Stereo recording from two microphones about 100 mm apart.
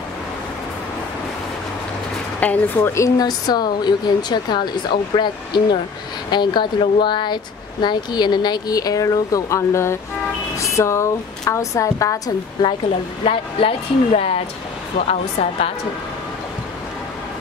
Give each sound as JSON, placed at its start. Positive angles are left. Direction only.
{"t": 2.4, "sound": "a woman's voice", "side_deg": 15}
{"t": 2.9, "sound": "speech", "side_deg": 35}
{"t": 13.2, "sound": "speech", "side_deg": 70}
{"t": 15.0, "sound": "a woman's voice", "side_deg": 90}